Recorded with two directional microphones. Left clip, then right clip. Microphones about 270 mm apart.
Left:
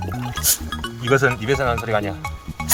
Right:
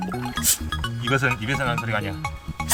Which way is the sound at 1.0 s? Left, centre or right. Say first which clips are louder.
Left 5 dB; centre.